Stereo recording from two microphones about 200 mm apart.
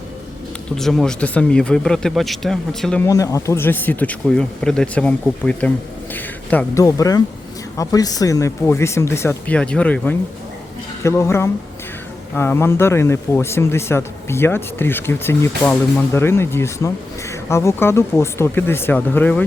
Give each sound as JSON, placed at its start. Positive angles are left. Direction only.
{"t": 0.8, "sound": "speech", "side_deg": 0}
{"t": 3.1, "sound": "a man's voice", "side_deg": 15}